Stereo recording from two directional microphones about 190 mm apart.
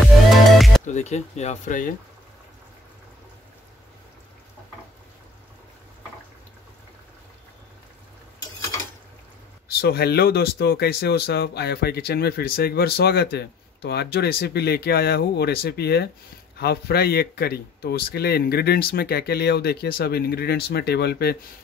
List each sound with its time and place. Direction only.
0.0 s music: centre (ahead or behind)
0.8 s speech: 35° left (ahead or behind)
9.8 s speech: 55° left (ahead or behind)